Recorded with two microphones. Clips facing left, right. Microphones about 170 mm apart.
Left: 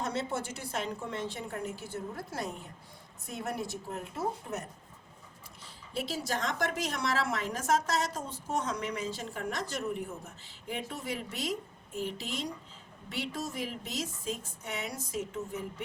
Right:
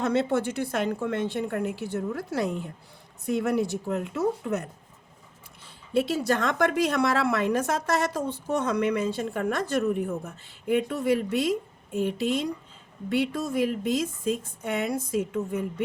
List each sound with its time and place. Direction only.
0.0 s a woman's voice: 65° right (ahead or behind)
5.9 s a woman's voice: 65° right (ahead or behind)